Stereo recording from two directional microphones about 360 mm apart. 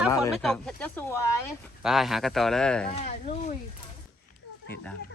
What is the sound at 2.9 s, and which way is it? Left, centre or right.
Speech, centre.